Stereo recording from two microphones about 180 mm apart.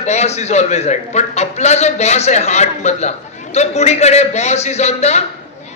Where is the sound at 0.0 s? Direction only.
40° left (ahead or behind).